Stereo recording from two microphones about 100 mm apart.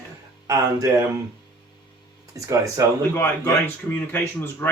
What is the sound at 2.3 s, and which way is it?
Speech, 35° right (ahead or behind).